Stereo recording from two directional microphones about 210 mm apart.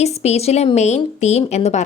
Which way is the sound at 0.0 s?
30° left (ahead or behind).